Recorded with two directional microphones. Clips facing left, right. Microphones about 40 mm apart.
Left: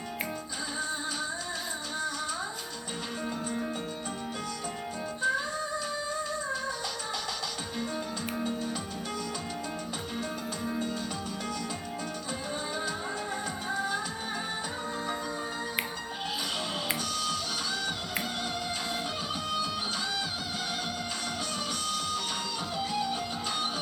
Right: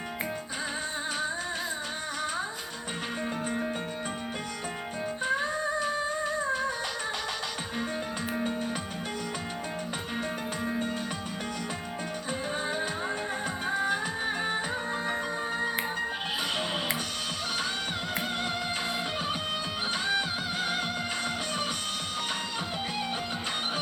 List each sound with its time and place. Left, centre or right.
0.8 s music: right
5.2 s music: right
12.6 s music: right
19.3 s music: right